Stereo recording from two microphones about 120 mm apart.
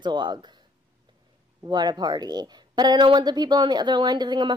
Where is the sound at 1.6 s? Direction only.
35° right (ahead or behind).